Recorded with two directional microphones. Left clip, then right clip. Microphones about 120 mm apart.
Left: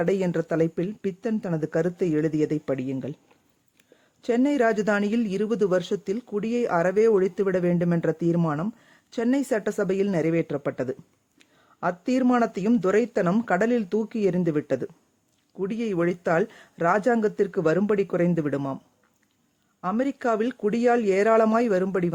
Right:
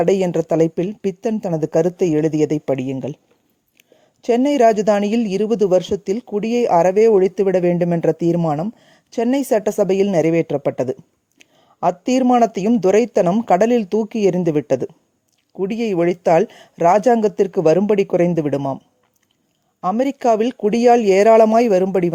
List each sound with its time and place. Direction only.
0.0 s speech: 40° right (ahead or behind)
4.2 s speech: 40° right (ahead or behind)
19.9 s speech: 40° right (ahead or behind)